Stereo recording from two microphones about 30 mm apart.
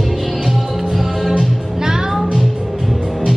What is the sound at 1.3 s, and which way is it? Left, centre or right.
Music, right.